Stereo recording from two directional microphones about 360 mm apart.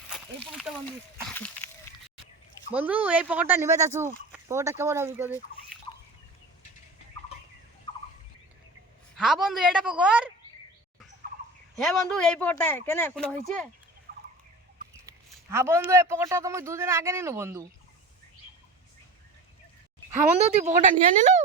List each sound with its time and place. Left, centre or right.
0.1 s a sound: centre
2.7 s speech: centre
9.1 s speech: centre
11.8 s speech: centre
14.1 s fowl: right
15.0 s speech: centre
20.6 s speech: centre